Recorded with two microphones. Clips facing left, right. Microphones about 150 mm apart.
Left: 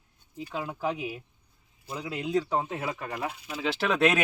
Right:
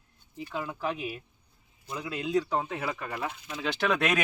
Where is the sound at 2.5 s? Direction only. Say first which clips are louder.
Left 1 dB; 10° left (ahead or behind).